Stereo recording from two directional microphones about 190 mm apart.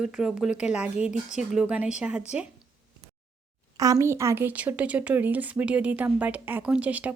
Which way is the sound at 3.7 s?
20° right (ahead or behind).